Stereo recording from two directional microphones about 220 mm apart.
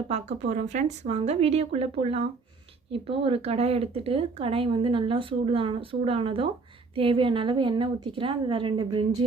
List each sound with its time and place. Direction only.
0.5 s speech: 30° right (ahead or behind)